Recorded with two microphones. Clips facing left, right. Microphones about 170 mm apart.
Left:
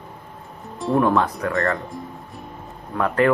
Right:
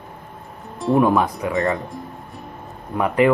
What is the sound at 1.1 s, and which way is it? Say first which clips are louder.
Speech: right 1 dB; 15° right (ahead or behind).